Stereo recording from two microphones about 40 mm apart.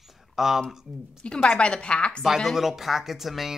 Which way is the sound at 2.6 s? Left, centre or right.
Centre.